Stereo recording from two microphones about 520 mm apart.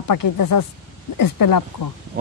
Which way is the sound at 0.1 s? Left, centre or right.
Left.